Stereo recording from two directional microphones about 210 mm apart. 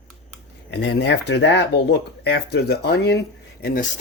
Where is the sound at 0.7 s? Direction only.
55° left (ahead or behind).